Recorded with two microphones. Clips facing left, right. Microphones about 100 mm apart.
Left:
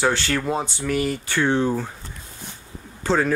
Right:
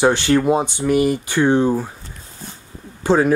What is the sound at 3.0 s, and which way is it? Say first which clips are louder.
Speech: right 5 dB; 15° right (ahead or behind).